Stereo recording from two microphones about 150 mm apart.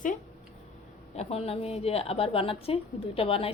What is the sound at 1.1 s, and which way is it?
A woman's voice, 45° left (ahead or behind).